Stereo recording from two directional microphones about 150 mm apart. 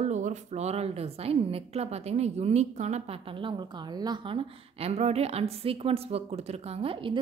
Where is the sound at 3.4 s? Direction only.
30° right (ahead or behind).